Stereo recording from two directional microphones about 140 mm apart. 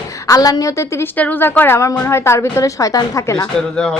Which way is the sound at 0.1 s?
25° left (ahead or behind).